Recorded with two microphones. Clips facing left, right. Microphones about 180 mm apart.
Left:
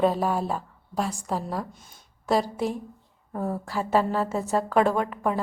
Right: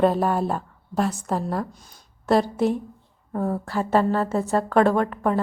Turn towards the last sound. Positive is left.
turn(degrees=5)  # may be behind; listen again after turning